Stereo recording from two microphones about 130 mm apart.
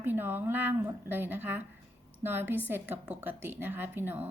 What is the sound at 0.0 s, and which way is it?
A woman's voice, 15° right (ahead or behind).